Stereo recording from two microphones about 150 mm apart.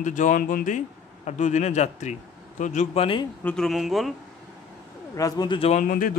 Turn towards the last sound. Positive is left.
turn(degrees=65)  # may be behind; listen again after turning